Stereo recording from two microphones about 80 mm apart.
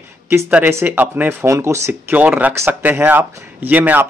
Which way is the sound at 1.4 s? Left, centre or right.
Right.